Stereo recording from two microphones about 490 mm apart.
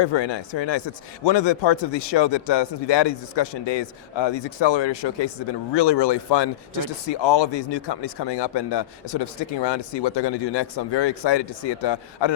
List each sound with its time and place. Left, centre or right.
0.0 s speech: left